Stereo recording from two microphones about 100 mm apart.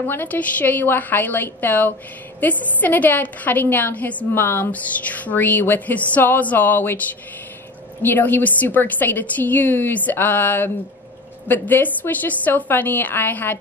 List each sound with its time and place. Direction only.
0.0 s a woman's voice: 20° left (ahead or behind)
8.0 s a woman's voice: 20° left (ahead or behind)